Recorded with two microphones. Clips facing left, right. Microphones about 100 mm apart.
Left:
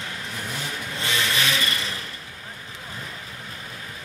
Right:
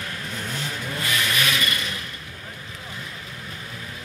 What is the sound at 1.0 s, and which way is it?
Vehicle, 30° left (ahead or behind).